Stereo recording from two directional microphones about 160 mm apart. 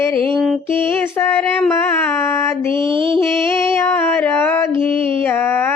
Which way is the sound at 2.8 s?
30° right (ahead or behind).